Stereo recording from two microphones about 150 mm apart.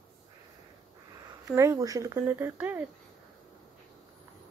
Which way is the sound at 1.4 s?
20° right (ahead or behind).